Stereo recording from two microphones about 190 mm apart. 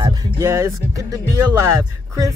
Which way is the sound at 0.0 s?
15° right (ahead or behind).